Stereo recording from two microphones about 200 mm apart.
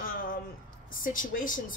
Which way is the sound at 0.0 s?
45° left (ahead or behind).